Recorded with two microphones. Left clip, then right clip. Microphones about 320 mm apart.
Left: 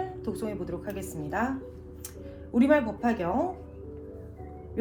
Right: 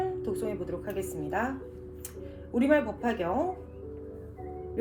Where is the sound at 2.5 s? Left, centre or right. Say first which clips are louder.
Left 2 dB; centre.